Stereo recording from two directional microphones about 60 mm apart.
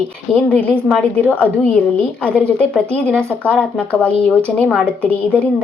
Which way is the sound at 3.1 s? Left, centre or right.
Right.